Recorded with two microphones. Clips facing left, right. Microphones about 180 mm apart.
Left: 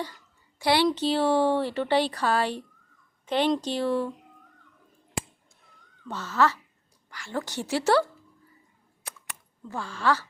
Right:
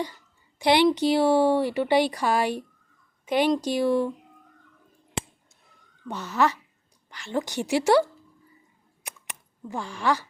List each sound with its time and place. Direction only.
0.6 s a woman's voice: 20° right (ahead or behind)
6.1 s speech: 15° right (ahead or behind)
9.0 s a sound: 20° right (ahead or behind)